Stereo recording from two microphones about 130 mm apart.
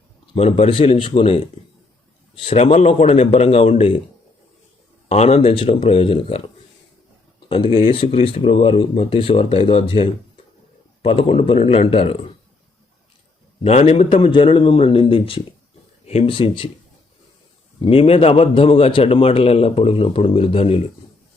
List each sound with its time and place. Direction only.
0.3 s a man's voice: 50° left (ahead or behind)
2.6 s a man's voice: 60° left (ahead or behind)
5.0 s a man's voice: 55° left (ahead or behind)
7.3 s a sound: 40° left (ahead or behind)
7.9 s a man's voice: 45° left (ahead or behind)
13.7 s a man's voice: 55° left (ahead or behind)
14.1 s a man's voice: 40° left (ahead or behind)
17.7 s a man's voice: 45° left (ahead or behind)